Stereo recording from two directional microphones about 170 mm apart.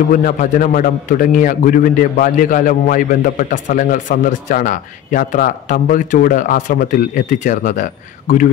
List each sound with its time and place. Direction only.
0.1 s a man's voice: 55° left (ahead or behind)